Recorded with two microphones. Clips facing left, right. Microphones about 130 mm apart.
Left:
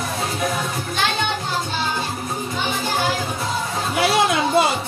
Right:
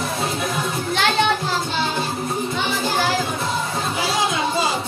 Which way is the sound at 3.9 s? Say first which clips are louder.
Left 6 dB; 65° left (ahead or behind).